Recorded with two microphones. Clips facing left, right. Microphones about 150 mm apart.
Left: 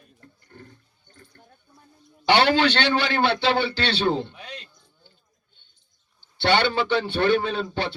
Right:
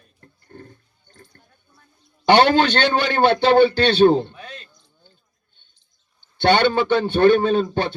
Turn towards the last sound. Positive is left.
turn(degrees=-45)  # may be behind; listen again after turning